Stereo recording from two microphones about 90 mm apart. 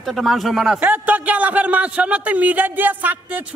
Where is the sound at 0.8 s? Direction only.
15° right (ahead or behind).